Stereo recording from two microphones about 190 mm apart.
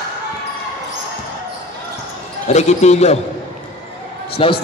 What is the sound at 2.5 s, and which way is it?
Speech, 35° left (ahead or behind).